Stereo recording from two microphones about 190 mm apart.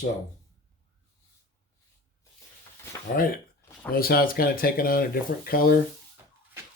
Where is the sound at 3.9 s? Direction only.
50° left (ahead or behind).